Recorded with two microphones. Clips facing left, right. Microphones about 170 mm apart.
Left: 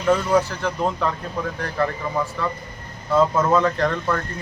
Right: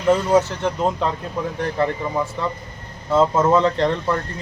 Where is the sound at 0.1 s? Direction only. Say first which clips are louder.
Right 2 dB; 20° right (ahead or behind).